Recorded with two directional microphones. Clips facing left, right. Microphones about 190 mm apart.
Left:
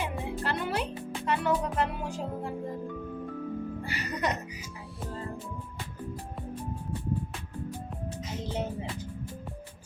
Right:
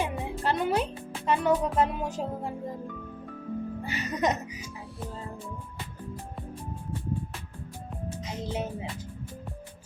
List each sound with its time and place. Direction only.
0.0 s music: 20° right (ahead or behind)
3.8 s music: 20° right (ahead or behind)
8.4 s music: 10° right (ahead or behind)